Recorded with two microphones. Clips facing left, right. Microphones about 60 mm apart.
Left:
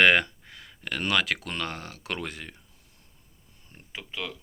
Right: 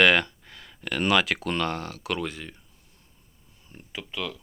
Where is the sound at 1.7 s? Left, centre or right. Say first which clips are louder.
Right 6 dB; centre.